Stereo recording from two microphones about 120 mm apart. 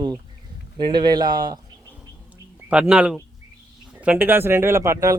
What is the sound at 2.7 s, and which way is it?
A man's voice, 10° right (ahead or behind).